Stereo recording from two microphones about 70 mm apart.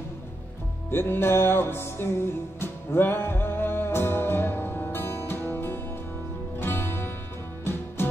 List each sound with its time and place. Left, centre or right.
0.9 s music: left